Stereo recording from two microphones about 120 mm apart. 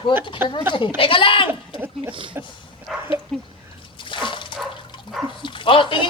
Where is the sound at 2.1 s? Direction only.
45° right (ahead or behind).